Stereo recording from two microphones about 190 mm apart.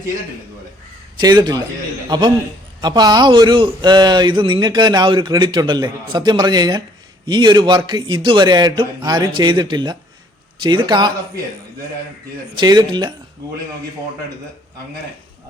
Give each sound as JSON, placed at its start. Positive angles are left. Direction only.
{"t": 1.2, "sound": "speech", "side_deg": -20}
{"t": 12.5, "sound": "speech", "side_deg": -20}